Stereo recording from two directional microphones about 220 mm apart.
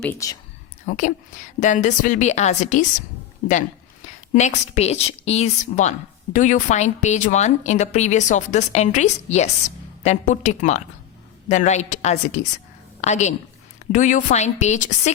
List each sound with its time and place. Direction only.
0.0 s speech: 10° left (ahead or behind)
0.9 s a woman's voice: 35° left (ahead or behind)
4.4 s a woman's voice: 30° left (ahead or behind)